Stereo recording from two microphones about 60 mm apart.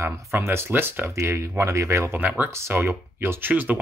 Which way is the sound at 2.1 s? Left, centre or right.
Right.